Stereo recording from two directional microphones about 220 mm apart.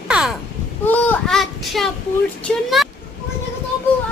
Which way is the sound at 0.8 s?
10° left (ahead or behind).